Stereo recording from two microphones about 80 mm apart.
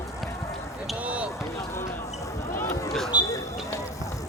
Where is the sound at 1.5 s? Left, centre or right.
Left.